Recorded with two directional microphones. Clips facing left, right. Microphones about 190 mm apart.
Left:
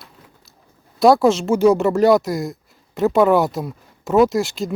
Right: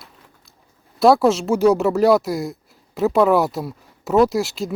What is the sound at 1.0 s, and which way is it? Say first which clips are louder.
Speech: left 1 dB; centre (ahead or behind).